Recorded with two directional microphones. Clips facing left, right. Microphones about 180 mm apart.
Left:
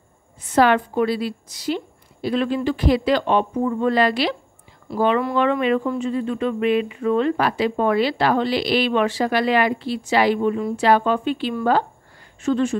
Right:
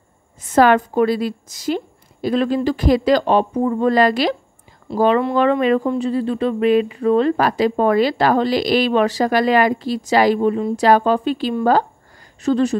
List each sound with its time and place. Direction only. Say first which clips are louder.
0.4 s a woman's voice: right 3 dB; 45° right (ahead or behind)